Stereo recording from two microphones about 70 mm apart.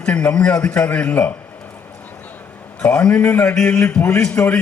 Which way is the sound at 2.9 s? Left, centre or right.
Left.